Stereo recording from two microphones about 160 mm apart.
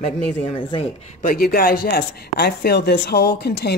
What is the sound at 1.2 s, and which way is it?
Speech, 65° left (ahead or behind).